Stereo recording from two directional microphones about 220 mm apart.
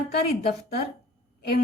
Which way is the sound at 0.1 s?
45° left (ahead or behind).